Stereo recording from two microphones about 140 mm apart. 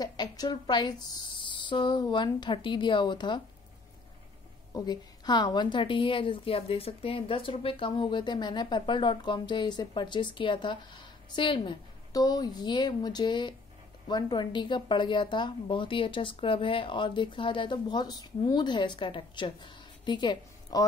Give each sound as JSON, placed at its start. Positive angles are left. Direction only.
{"t": 0.0, "sound": "a woman's voice", "side_deg": 30}
{"t": 4.7, "sound": "a woman's voice", "side_deg": 30}